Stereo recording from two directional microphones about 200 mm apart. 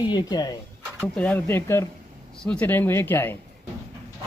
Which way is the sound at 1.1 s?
5° left (ahead or behind).